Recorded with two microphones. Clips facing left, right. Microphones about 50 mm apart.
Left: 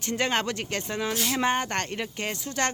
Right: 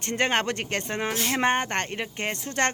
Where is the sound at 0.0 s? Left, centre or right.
Right.